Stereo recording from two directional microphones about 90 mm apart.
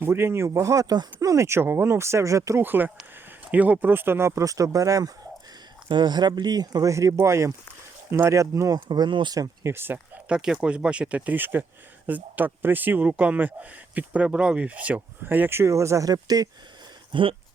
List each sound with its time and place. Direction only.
0.0 s speech: 25° right (ahead or behind)
2.6 s speech: 20° right (ahead or behind); by 5.1 s 40° right (ahead or behind)
5.9 s speech: 55° right (ahead or behind); by 8.8 s 40° right (ahead or behind)
8.9 s speech: 60° right (ahead or behind)
9.6 s speech: 25° right (ahead or behind)
10.2 s speech: 10° right (ahead or behind); by 16.5 s 45° right (ahead or behind)
17.1 s a sound: 65° right (ahead or behind)